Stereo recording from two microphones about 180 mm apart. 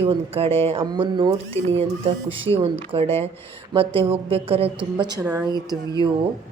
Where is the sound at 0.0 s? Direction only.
35° right (ahead or behind).